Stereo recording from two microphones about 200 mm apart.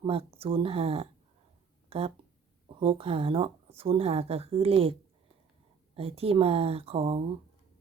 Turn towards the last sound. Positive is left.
turn(degrees=-25)  # may be behind; listen again after turning